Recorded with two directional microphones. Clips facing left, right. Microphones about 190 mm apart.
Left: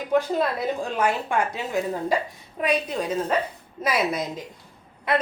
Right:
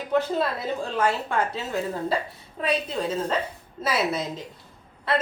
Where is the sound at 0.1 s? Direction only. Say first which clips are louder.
Left 2 dB; 15° left (ahead or behind).